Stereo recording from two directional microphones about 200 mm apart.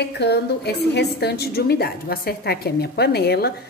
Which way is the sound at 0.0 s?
55° left (ahead or behind).